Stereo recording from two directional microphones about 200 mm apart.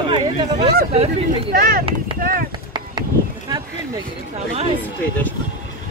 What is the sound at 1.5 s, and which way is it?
Speech, 50° right (ahead or behind).